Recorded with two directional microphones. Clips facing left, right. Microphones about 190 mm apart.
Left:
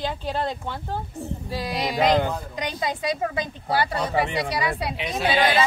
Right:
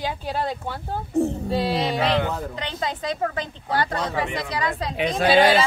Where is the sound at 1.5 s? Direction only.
30° right (ahead or behind).